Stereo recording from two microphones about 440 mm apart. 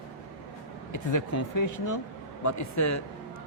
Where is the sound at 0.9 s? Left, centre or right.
Left.